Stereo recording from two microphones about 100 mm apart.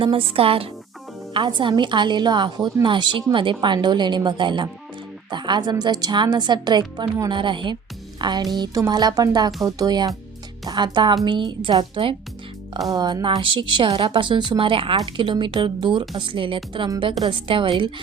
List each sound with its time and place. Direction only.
0.0 s speech: 65° right (ahead or behind)
1.3 s a woman's voice: 55° right (ahead or behind)
9.6 s music: 35° right (ahead or behind)
10.7 s a woman's voice: 45° right (ahead or behind)
12.9 s music: 40° right (ahead or behind)
13.4 s a woman's voice: 55° right (ahead or behind)